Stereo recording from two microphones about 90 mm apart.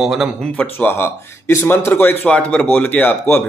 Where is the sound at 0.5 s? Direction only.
20° left (ahead or behind).